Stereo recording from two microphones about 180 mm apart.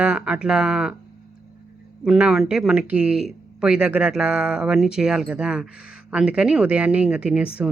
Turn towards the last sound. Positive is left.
turn(degrees=-5)  # may be behind; listen again after turning